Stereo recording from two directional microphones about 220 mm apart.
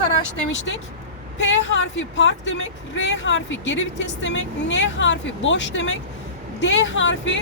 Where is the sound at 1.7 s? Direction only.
60° left (ahead or behind).